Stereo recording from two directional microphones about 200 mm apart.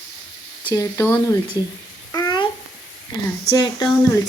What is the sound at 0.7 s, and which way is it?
Speech, 15° left (ahead or behind).